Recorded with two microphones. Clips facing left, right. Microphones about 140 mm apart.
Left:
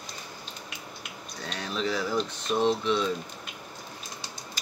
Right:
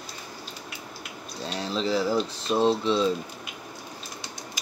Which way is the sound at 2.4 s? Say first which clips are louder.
Right 2 dB; 30° right (ahead or behind).